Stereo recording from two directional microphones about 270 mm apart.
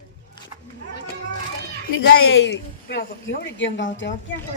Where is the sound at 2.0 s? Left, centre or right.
Left.